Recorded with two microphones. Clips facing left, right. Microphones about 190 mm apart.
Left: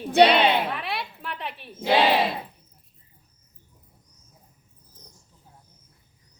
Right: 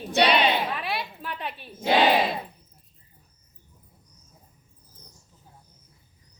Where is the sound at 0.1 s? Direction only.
55° left (ahead or behind).